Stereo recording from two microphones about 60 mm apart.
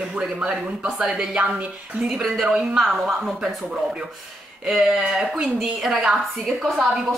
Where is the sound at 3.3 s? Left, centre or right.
Centre.